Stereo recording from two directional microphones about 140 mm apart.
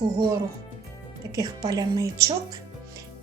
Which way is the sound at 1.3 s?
25° right (ahead or behind).